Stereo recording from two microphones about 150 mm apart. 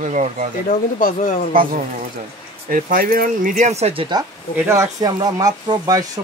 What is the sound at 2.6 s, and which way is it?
Speech, 70° right (ahead or behind).